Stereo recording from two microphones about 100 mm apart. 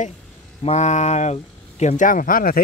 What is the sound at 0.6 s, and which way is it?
Speech, 90° left.